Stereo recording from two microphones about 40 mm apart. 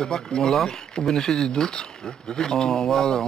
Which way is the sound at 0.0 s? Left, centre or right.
Centre.